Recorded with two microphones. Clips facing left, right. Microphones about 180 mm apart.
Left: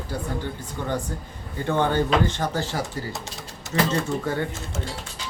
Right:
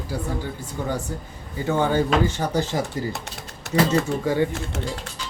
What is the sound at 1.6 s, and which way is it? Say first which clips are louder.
Speech: right 1 dB; 10° right (ahead or behind).